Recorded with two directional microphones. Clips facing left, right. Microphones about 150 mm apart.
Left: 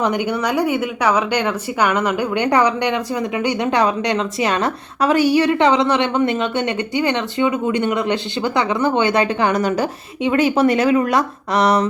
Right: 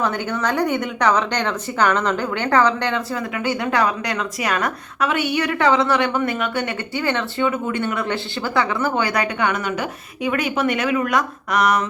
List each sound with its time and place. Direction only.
0.0 s speech: 15° left (ahead or behind)
9.5 s speech: 35° left (ahead or behind)